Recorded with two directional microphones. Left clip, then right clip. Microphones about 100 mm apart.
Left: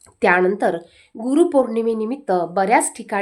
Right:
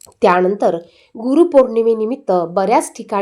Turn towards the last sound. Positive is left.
turn(degrees=-15)  # may be behind; listen again after turning